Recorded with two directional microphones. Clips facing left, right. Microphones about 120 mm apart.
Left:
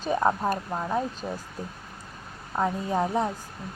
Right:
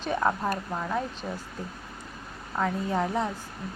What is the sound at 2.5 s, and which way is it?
Speech, 15° left (ahead or behind).